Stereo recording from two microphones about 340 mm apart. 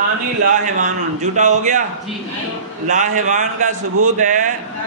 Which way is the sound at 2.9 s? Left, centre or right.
Right.